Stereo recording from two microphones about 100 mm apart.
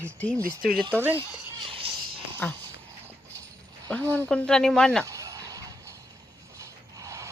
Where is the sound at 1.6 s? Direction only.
65° right (ahead or behind).